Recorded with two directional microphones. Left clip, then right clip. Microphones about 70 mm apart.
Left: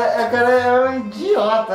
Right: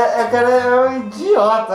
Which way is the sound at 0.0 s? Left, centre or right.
Left.